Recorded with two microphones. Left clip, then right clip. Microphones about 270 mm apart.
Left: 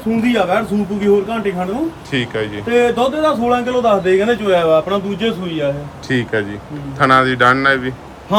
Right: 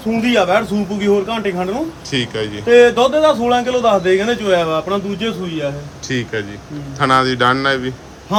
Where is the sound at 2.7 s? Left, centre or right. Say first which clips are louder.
Right 5 dB; right.